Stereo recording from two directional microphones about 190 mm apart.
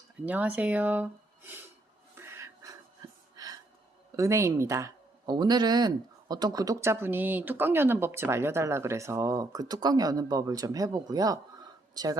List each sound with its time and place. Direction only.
0.3 s speech: 5° right (ahead or behind)
2.1 s a sound: 15° right (ahead or behind)
4.2 s speech: 15° right (ahead or behind)